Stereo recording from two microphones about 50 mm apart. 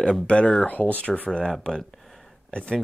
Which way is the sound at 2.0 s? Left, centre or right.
Centre.